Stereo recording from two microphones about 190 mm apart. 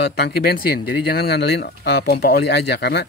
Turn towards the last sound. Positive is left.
turn(degrees=60)  # may be behind; listen again after turning